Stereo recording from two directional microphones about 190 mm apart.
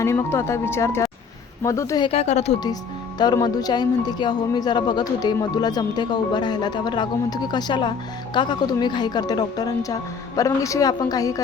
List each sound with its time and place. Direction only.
0.0 s speech: 15° left (ahead or behind)
2.0 s speech: 35° left (ahead or behind)
3.2 s speech: 20° left (ahead or behind)